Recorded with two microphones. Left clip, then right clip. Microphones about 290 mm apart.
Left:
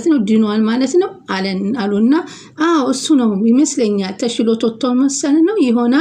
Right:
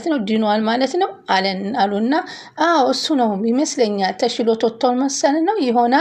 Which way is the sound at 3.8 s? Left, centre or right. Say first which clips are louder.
Even; centre.